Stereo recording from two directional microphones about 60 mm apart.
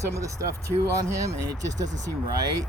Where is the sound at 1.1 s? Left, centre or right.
Right.